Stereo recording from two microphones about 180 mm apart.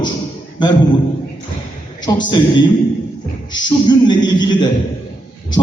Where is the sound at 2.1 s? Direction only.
25° left (ahead or behind).